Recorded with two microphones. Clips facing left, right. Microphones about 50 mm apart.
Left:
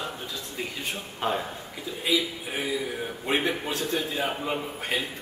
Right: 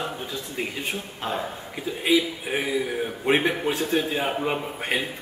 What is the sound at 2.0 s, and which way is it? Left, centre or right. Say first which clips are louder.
A man's voice: right 5 dB; right.